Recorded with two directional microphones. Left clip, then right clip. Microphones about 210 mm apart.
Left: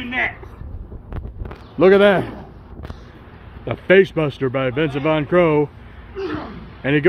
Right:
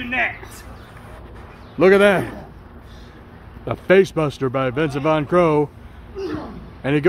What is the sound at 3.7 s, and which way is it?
Speech, 5° right (ahead or behind).